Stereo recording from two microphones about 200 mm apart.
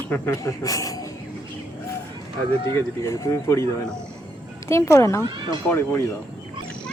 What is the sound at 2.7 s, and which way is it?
Speech, 15° left (ahead or behind).